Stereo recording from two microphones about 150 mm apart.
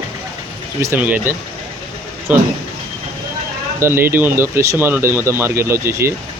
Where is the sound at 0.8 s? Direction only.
15° right (ahead or behind).